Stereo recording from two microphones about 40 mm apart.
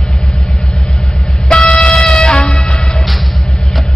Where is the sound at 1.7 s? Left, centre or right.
Left.